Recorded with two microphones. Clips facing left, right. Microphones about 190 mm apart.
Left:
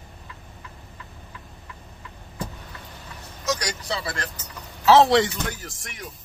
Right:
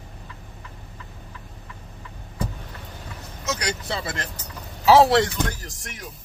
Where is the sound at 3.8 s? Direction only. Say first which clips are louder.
Even; 20° right (ahead or behind).